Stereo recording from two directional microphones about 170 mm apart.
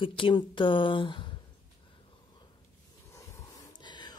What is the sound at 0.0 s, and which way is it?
Speech, 30° left (ahead or behind).